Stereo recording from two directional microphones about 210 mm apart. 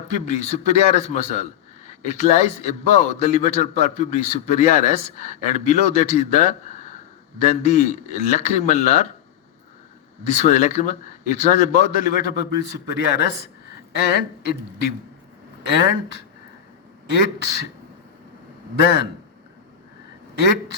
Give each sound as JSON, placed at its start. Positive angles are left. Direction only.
{"t": 0.1, "sound": "a man's voice", "side_deg": 35}
{"t": 10.2, "sound": "a man's voice", "side_deg": 35}